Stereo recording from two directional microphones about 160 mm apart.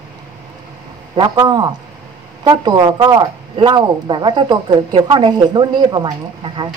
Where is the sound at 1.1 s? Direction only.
25° right (ahead or behind).